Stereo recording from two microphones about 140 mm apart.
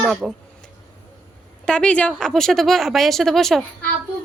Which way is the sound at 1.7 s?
10° left (ahead or behind).